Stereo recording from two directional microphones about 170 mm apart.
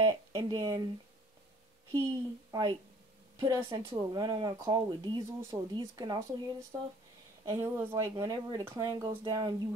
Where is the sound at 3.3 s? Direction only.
25° right (ahead or behind).